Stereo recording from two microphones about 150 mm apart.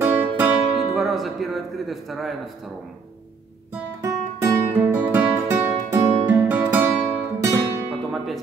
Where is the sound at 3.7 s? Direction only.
15° right (ahead or behind).